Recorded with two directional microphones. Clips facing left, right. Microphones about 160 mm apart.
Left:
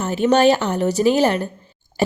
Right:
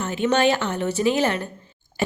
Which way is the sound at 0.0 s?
40° left (ahead or behind).